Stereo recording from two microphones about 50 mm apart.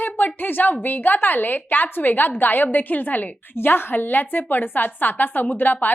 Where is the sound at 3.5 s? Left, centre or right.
Left.